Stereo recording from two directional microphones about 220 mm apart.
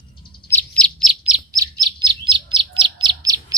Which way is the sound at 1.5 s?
20° right (ahead or behind).